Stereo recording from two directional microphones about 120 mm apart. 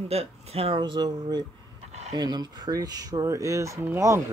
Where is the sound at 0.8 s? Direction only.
35° right (ahead or behind).